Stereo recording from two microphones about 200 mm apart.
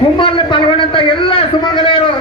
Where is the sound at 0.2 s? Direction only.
25° left (ahead or behind).